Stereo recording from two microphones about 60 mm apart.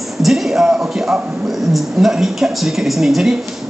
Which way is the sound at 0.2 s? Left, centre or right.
Centre.